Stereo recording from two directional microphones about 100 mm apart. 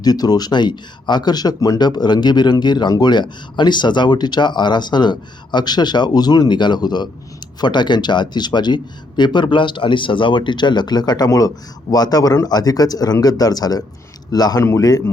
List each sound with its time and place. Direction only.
0.0 s speech: 40° left (ahead or behind)